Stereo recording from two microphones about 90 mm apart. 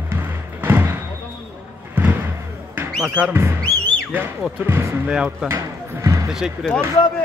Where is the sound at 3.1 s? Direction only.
20° right (ahead or behind).